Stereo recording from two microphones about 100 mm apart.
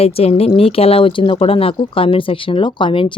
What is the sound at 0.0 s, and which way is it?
Speech, 85° left.